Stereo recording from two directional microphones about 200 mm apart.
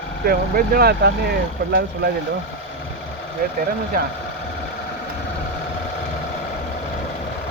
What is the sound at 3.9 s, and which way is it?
Speech, 45° right (ahead or behind).